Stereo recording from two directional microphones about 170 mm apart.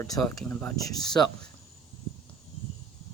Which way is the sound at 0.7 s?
20° left (ahead or behind).